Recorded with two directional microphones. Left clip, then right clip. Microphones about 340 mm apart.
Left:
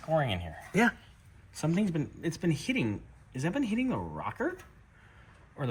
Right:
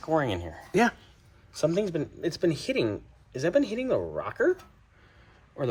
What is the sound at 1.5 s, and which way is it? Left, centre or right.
Speech, right.